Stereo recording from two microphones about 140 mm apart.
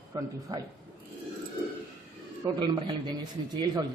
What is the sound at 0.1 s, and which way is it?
Speech, 25° right (ahead or behind).